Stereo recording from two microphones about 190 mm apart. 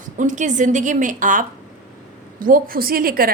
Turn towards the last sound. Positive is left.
turn(degrees=-50)  # may be behind; listen again after turning